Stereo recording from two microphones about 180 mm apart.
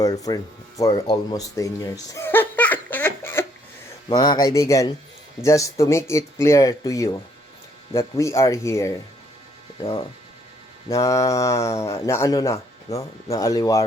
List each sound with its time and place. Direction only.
0.0 s speech: 20° left (ahead or behind)
1.0 s baby laughter: 20° left (ahead or behind)
4.1 s speech: 20° left (ahead or behind)
10.8 s speech: 20° left (ahead or behind)